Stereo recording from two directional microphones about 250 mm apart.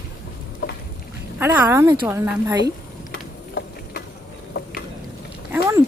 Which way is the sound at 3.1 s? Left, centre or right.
Left.